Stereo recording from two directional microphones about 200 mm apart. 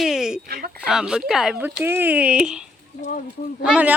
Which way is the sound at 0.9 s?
5° right (ahead or behind).